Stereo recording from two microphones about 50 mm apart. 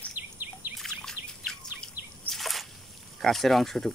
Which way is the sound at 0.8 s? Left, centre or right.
Centre.